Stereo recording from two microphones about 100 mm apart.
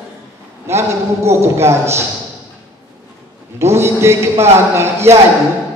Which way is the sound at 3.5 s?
25° right (ahead or behind).